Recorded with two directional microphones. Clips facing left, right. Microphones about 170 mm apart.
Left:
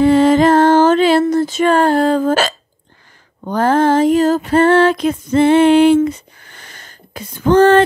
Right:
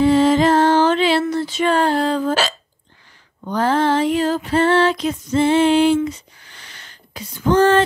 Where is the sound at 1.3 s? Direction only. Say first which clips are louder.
Left 5 dB; 45° left (ahead or behind).